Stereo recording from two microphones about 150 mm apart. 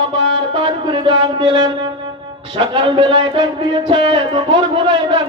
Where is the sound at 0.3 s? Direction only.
35° right (ahead or behind).